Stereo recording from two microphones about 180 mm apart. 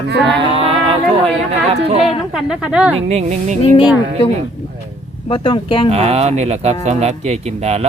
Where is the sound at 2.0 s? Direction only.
5° right (ahead or behind).